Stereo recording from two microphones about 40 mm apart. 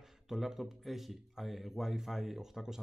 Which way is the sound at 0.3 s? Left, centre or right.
Centre.